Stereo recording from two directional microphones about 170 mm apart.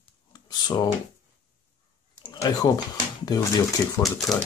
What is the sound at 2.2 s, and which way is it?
Speech, 20° left (ahead or behind).